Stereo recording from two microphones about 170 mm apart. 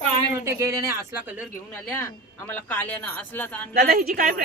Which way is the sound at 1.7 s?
10° left (ahead or behind).